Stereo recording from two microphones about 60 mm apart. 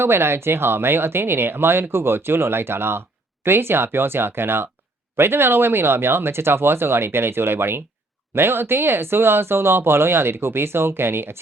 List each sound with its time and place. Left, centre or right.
0.0 s speech: right